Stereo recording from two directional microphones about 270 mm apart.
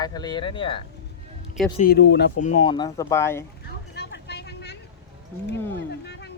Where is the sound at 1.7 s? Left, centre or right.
Left.